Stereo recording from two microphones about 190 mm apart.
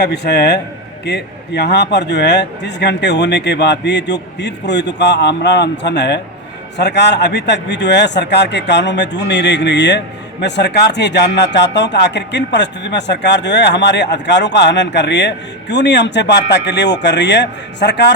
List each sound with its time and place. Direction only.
0.0 s speech: 60° left (ahead or behind)